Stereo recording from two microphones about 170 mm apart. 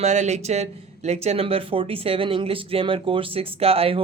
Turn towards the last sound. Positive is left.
turn(degrees=-35)  # may be behind; listen again after turning